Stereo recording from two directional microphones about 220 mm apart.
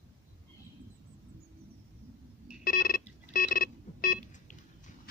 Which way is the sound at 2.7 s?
40° left (ahead or behind).